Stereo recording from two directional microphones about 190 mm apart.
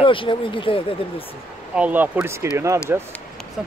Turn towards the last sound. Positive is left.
turn(degrees=-10)  # may be behind; listen again after turning